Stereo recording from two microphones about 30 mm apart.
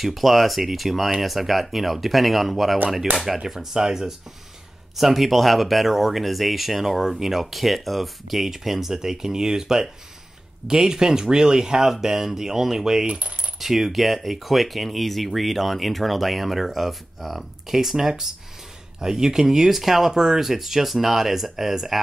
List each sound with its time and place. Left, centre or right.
0.0 s speech: centre
3.3 s speech: centre
4.9 s speech: centre
7.3 s speech: centre
13.0 s coin: right
13.6 s speech: centre
17.7 s speech: centre
19.7 s speech: centre